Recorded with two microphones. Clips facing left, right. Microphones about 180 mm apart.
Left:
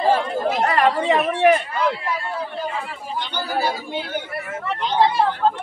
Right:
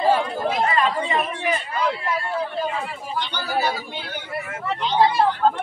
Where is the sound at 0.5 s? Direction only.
70° left (ahead or behind).